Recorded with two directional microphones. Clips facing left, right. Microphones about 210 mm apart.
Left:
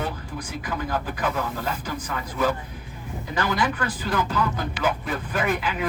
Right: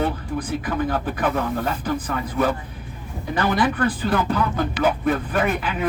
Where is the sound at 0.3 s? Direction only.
55° right (ahead or behind).